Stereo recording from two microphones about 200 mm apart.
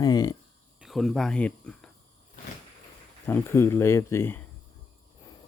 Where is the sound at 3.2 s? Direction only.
10° left (ahead or behind).